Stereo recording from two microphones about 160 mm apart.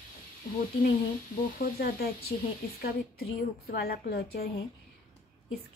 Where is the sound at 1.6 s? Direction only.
70° left (ahead or behind).